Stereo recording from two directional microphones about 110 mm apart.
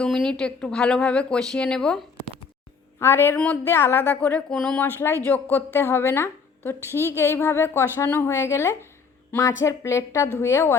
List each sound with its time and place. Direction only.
0.0 s speech: 5° left (ahead or behind)
3.0 s a woman's voice: 20° left (ahead or behind)
4.9 s a woman's voice: 20° left (ahead or behind)